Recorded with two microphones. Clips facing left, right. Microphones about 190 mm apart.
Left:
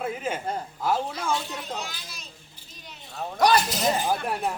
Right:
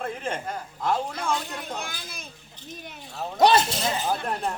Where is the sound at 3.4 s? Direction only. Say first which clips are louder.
Right 2 dB; 25° right (ahead or behind).